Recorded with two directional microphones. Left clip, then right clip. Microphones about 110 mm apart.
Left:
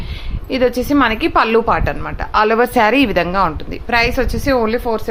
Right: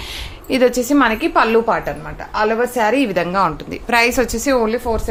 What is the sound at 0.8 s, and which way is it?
Speech, 15° left (ahead or behind).